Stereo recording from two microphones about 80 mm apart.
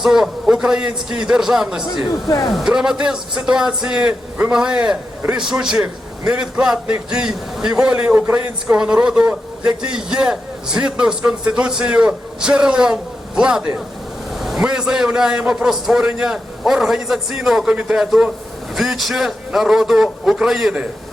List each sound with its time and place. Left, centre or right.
0.0 s a man's voice: centre
2.2 s speech: left
2.5 s a man's voice: centre